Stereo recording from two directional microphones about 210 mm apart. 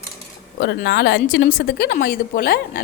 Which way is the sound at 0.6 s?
55° left (ahead or behind).